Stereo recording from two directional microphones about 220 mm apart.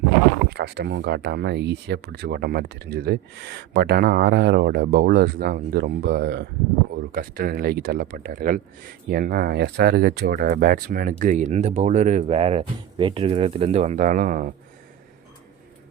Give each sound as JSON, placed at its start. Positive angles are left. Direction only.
{"t": 0.4, "sound": "speech", "side_deg": -50}